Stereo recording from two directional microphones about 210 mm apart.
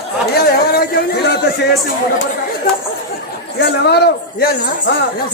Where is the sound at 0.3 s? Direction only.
50° left (ahead or behind).